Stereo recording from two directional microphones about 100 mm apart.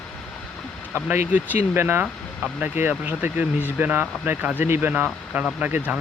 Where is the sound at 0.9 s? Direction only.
15° right (ahead or behind).